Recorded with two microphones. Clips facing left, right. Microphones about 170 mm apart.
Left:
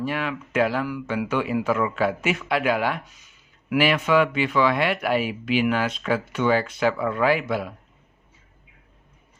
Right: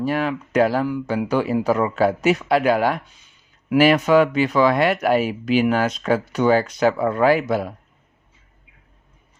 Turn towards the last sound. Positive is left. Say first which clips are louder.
# right 5 dB
turn(degrees=-40)  # may be behind; listen again after turning